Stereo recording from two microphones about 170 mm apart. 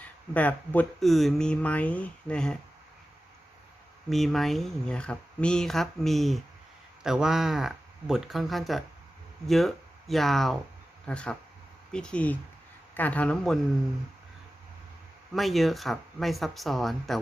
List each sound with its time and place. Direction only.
0.0 s speech: 10° left (ahead or behind)
4.1 s speech: centre (ahead or behind)
15.3 s speech: centre (ahead or behind)